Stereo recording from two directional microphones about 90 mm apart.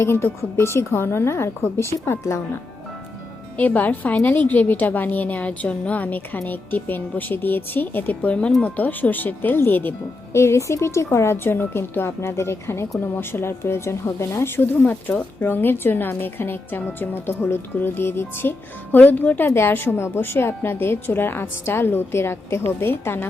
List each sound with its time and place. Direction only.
0.0 s a woman's voice: 25° left (ahead or behind)
3.6 s a woman's voice: 20° left (ahead or behind)